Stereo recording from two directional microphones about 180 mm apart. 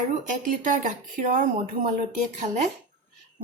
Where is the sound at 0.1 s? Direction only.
45° right (ahead or behind).